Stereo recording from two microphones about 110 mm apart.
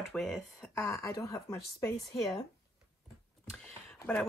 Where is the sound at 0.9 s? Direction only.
30° left (ahead or behind).